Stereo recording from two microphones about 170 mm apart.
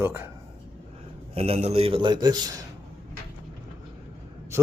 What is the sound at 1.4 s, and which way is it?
Speech, 35° right (ahead or behind).